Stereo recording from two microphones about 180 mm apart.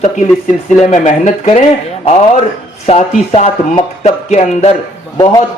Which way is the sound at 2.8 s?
35° left (ahead or behind).